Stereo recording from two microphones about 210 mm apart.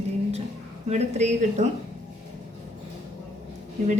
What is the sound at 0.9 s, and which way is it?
Speech, 30° right (ahead or behind).